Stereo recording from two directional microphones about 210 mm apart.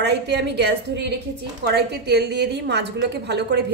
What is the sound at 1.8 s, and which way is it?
A woman's voice, 50° right (ahead or behind).